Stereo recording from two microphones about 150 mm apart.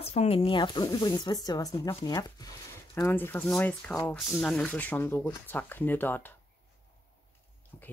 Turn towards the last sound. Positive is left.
turn(degrees=15)  # may be behind; listen again after turning